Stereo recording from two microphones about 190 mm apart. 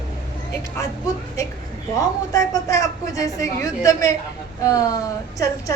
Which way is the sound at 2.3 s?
20° left (ahead or behind).